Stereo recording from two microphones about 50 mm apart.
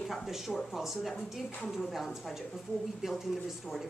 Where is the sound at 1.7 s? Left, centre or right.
Centre.